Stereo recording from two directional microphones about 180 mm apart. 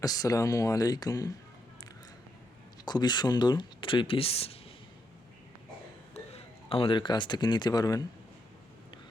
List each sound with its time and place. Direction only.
0.0 s speech: 20° left (ahead or behind)
2.8 s speech: 25° left (ahead or behind)
6.1 s a man's voice: 35° left (ahead or behind)